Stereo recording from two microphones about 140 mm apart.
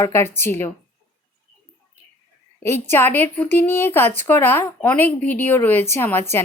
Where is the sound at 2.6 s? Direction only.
15° left (ahead or behind).